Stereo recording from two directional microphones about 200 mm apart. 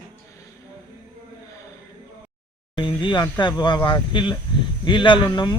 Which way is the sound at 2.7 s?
20° left (ahead or behind).